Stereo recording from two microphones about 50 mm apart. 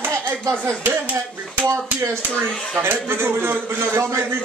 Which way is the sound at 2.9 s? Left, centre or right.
Right.